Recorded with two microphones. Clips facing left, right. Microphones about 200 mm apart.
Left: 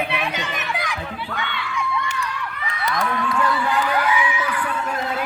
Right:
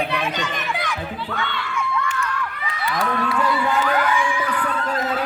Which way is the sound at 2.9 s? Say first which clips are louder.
Right 1 dB; 5° right (ahead or behind).